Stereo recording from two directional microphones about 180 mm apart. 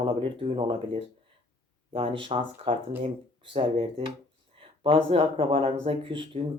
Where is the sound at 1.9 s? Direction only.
30° right (ahead or behind).